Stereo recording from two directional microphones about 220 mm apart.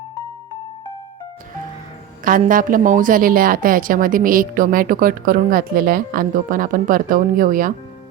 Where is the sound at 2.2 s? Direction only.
40° right (ahead or behind).